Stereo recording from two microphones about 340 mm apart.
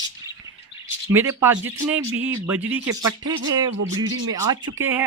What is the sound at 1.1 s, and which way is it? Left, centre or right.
Speech, centre.